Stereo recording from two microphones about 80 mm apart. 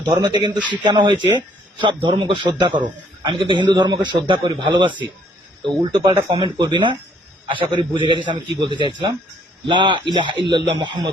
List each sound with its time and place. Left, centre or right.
0.2 s speech: right
1.8 s a man's voice: right
3.2 s a man's voice: right
5.8 s speech: right
6.3 s speech: right
7.4 s a man's voice: right
8.3 s a man's voice: right